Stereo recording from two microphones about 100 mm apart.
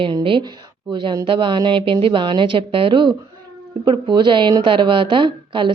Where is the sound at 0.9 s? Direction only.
50° right (ahead or behind).